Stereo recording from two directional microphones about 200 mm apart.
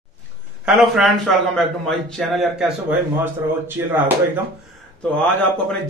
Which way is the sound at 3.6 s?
10° right (ahead or behind).